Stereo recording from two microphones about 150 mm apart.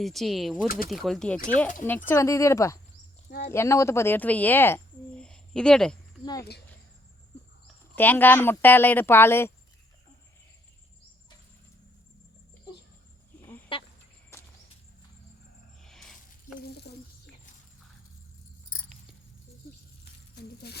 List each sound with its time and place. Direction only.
0.0 s speech: centre (ahead or behind); by 2.7 s 20° left (ahead or behind)
3.2 s speech: 90° left
3.5 s speech: 20° left (ahead or behind)
6.2 s speech: 25° left (ahead or behind)
7.9 s speech: 15° left (ahead or behind)
15.8 s a sound: 5° left (ahead or behind)
20.3 s a sound: 90° left